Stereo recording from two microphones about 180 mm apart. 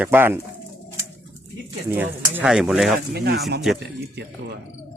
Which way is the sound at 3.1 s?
65° right (ahead or behind).